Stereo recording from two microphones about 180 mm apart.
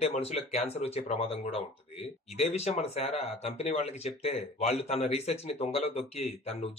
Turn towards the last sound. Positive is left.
turn(degrees=35)  # may be behind; listen again after turning